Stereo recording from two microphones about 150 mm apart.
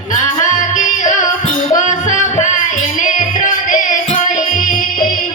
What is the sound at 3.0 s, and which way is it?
Music, 60° left (ahead or behind).